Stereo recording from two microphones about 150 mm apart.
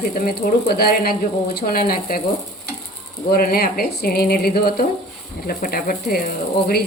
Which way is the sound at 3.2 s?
90° left.